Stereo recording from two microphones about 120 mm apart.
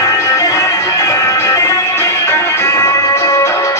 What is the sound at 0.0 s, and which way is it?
Music, 30° left (ahead or behind).